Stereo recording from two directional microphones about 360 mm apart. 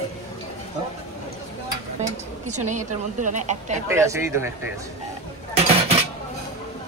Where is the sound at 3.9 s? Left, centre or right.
Centre.